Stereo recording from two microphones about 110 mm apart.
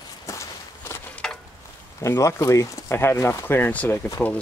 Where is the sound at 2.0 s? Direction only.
25° left (ahead or behind).